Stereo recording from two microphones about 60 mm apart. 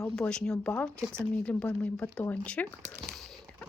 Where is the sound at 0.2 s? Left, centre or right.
Centre.